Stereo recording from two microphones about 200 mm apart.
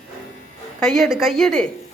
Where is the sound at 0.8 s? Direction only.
Centre (ahead or behind).